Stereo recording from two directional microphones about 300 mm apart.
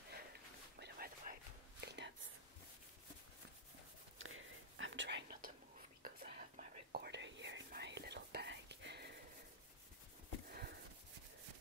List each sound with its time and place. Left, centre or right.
0.7 s whispering: right
4.2 s whispering: right
10.5 s a sound: right